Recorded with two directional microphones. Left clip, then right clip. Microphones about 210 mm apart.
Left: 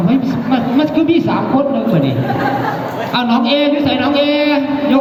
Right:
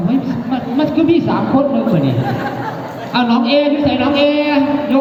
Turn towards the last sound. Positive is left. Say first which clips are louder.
# left 1 dB
turn(degrees=50)  # may be behind; listen again after turning